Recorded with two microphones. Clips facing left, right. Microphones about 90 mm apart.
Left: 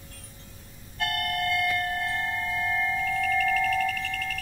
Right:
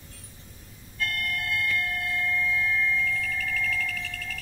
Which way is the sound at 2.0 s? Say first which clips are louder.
Right 1 dB; 55° left (ahead or behind).